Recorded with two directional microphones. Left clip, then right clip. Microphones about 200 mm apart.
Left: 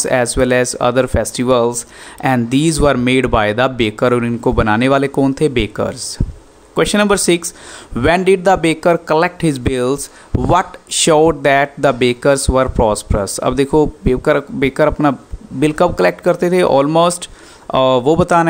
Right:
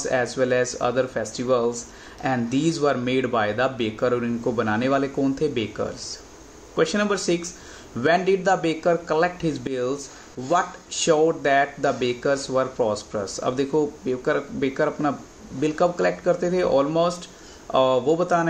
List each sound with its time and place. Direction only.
0.0 s speech: 45° left (ahead or behind)